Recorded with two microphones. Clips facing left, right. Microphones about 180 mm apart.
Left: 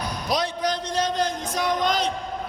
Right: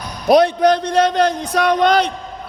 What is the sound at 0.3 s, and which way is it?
A man's voice, 60° right (ahead or behind).